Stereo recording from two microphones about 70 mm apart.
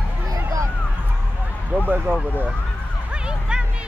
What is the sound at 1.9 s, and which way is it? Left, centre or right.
Speech, right.